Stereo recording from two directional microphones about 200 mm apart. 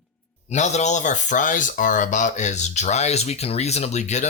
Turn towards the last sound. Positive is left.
turn(degrees=35)  # may be behind; listen again after turning